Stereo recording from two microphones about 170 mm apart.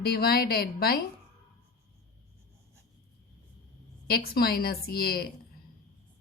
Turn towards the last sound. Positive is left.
turn(degrees=65)  # may be behind; listen again after turning